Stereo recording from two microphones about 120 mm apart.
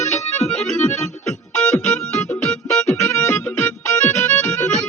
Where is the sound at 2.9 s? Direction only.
20° left (ahead or behind).